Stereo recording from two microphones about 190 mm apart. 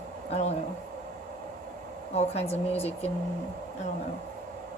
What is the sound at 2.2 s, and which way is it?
Speech, 35° left (ahead or behind).